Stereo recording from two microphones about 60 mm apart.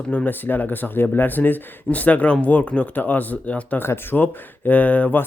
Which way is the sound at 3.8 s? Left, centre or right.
Left.